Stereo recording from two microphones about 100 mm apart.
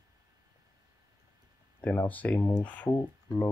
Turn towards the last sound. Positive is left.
turn(degrees=35)  # may be behind; listen again after turning